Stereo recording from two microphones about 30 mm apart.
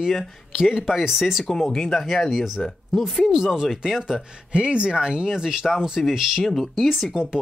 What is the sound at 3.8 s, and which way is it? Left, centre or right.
Speech, centre.